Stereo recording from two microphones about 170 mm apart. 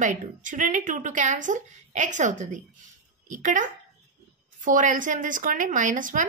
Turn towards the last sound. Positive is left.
turn(degrees=-50)  # may be behind; listen again after turning